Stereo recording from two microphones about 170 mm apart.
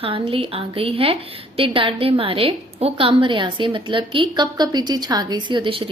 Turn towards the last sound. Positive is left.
turn(degrees=-30)  # may be behind; listen again after turning